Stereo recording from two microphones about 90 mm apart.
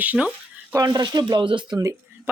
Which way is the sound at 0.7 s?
50° right (ahead or behind).